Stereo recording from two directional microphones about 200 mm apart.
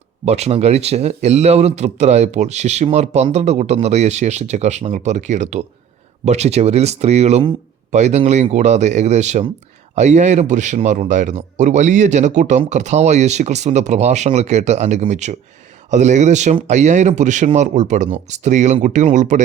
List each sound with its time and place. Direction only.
0.3 s a man's voice: 30° right (ahead or behind)